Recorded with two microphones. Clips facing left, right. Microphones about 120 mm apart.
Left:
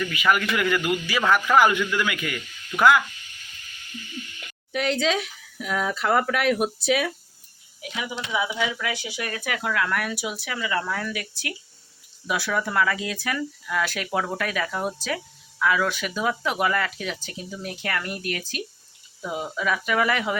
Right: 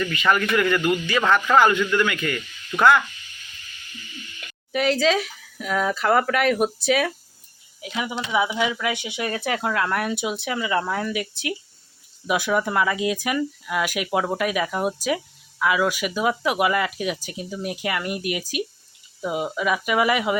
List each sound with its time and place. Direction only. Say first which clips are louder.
0.0 s a man's voice: right 1 dB; 5° left (ahead or behind)
4.7 s speech: right 4 dB; centre (ahead or behind)
7.8 s speech: right 4 dB; 25° right (ahead or behind)